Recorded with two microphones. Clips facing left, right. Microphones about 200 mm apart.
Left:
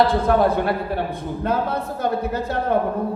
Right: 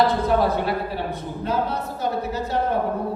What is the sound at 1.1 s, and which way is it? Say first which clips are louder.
A woman's voice: left 2 dB; 55° left (ahead or behind).